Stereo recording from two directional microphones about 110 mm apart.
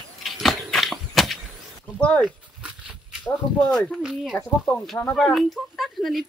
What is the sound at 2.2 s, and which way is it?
Dog, 10° right (ahead or behind).